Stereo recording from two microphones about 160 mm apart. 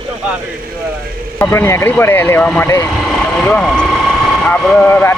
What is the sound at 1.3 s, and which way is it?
Speech, 10° left (ahead or behind).